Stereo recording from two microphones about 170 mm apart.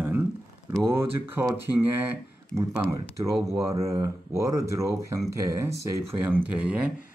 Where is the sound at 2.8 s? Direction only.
20° right (ahead or behind).